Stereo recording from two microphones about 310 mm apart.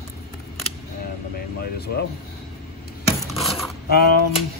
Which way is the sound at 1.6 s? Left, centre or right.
Left.